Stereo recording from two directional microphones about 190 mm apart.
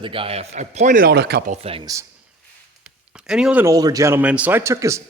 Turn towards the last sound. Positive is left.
turn(degrees=-15)  # may be behind; listen again after turning